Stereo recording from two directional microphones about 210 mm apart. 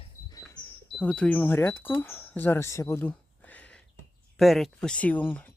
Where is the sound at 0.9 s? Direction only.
5° left (ahead or behind).